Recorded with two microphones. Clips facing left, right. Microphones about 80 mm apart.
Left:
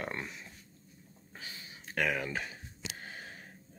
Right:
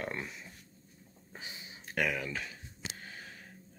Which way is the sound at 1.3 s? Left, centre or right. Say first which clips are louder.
Right 1 dB; right.